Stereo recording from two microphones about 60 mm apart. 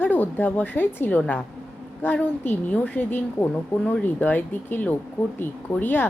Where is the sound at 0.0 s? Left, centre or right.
Left.